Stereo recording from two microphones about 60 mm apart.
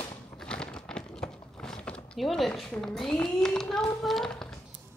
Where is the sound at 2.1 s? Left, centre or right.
Centre.